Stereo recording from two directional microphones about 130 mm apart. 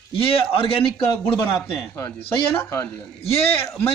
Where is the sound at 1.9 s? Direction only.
20° left (ahead or behind).